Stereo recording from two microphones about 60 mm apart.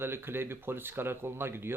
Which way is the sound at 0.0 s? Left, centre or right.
Right.